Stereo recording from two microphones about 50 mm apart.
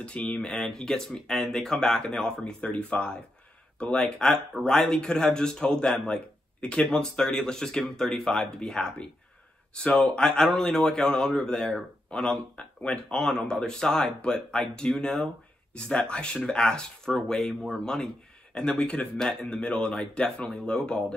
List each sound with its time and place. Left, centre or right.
0.4 s speech: centre
4.6 s speech: centre
12.1 s speech: left